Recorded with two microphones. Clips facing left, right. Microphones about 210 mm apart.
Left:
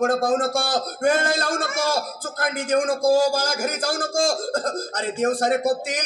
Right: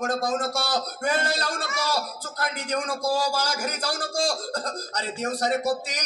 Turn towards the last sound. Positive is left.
turn(degrees=50)  # may be behind; listen again after turning